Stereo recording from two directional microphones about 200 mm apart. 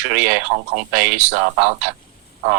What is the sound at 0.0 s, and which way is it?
Speech, 5° right (ahead or behind).